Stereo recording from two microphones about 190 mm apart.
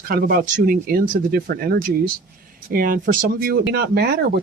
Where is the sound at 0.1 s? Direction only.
50° right (ahead or behind).